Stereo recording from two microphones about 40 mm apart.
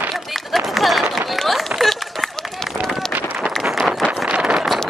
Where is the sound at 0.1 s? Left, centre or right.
Centre.